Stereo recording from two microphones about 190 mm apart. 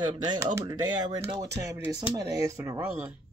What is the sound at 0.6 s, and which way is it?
Speech, 20° right (ahead or behind).